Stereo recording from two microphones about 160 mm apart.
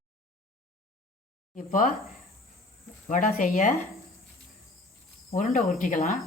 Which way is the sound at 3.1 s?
60° left (ahead or behind).